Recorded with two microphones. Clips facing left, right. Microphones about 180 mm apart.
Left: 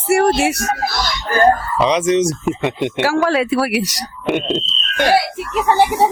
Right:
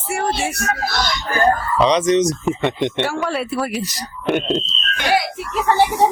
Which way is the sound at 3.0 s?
90° left.